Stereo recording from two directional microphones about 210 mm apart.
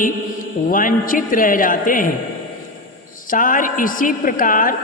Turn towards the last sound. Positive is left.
turn(degrees=40)  # may be behind; listen again after turning